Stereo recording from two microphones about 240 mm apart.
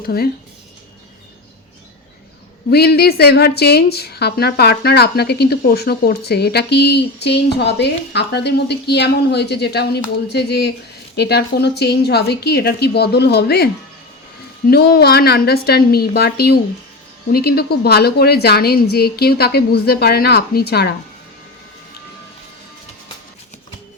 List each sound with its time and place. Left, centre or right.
0.0 s a woman's voice: left
2.6 s a woman's voice: left
14.7 s a woman's voice: left